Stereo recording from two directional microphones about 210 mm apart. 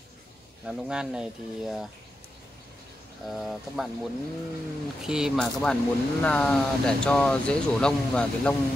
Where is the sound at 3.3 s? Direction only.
Centre (ahead or behind).